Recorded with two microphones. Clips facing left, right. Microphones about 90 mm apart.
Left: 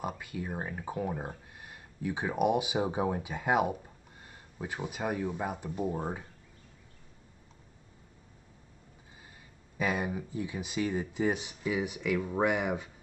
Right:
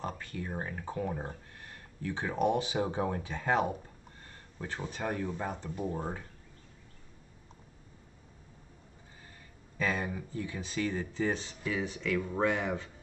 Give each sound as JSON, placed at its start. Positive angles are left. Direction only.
{"t": 0.0, "sound": "speech", "side_deg": 10}
{"t": 9.8, "sound": "speech", "side_deg": 15}